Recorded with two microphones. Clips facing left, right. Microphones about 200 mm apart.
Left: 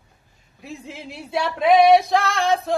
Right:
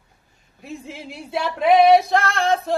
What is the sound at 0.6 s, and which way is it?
Music, centre (ahead or behind).